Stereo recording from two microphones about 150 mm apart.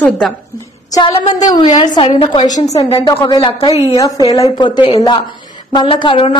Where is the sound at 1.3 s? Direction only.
30° left (ahead or behind).